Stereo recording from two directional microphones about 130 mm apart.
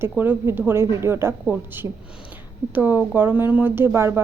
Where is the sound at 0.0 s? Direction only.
15° right (ahead or behind).